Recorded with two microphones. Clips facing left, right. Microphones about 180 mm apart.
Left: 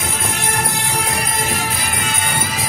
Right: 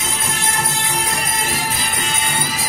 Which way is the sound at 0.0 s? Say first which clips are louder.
Left 1 dB; 55° left (ahead or behind).